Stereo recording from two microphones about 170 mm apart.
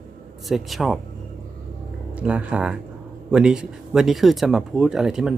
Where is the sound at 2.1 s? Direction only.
10° right (ahead or behind).